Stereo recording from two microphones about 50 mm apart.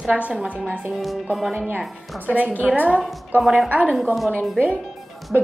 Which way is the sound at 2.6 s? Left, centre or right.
Right.